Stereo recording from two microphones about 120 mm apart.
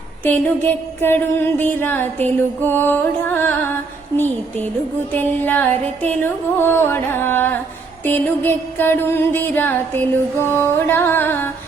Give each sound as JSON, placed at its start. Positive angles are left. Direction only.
{"t": 0.3, "sound": "music", "side_deg": 15}